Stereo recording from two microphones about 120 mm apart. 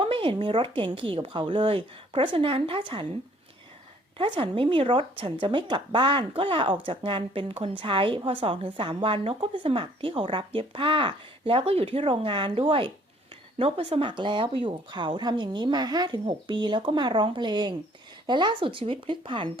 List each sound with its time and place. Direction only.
0.0 s a woman's voice: 50° right (ahead or behind)
4.2 s a woman's voice: 45° right (ahead or behind)
14.1 s a woman's voice: 40° right (ahead or behind)